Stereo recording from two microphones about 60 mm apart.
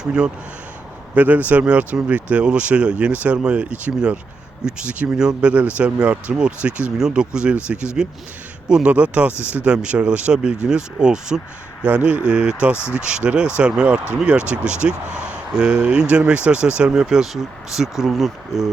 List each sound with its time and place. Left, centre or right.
0.0 s speech: centre
1.1 s speech: right
12.7 s speech: left
13.0 s speech: centre